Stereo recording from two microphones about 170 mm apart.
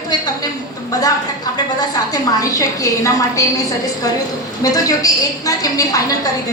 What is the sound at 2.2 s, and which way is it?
A woman's voice, 20° left (ahead or behind).